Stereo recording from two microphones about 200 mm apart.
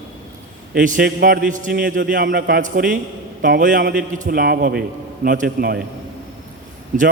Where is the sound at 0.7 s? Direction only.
40° right (ahead or behind).